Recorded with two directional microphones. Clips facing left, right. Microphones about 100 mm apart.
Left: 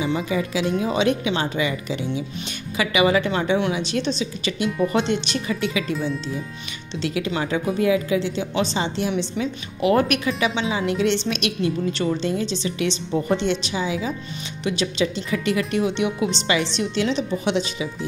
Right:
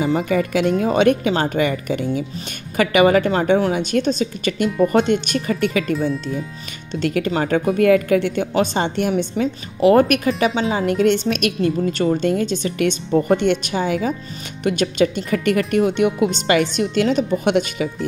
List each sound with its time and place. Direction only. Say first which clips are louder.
0.0 s a woman's voice: right 5 dB; 50° right (ahead or behind)
7.0 s a woman's voice: right 5 dB; 50° right (ahead or behind)